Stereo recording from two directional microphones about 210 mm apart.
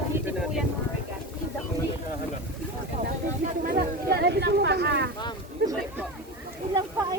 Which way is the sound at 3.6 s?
45° right (ahead or behind).